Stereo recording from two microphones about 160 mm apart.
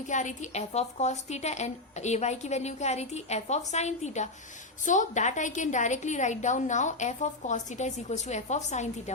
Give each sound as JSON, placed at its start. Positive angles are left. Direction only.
{"t": 0.1, "sound": "a woman's voice", "side_deg": 50}